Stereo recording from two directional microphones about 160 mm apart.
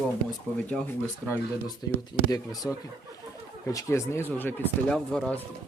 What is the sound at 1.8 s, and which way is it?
Speech, 20° left (ahead or behind).